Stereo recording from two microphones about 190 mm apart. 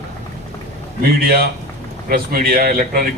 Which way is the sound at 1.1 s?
50° right (ahead or behind).